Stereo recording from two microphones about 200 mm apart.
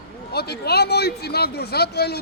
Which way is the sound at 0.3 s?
55° left (ahead or behind).